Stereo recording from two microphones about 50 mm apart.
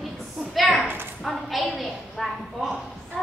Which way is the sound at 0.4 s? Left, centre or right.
Centre.